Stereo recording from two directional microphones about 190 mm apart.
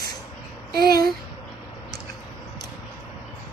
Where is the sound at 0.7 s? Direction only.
55° right (ahead or behind).